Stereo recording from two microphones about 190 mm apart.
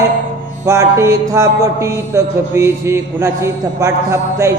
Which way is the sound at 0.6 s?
15° right (ahead or behind).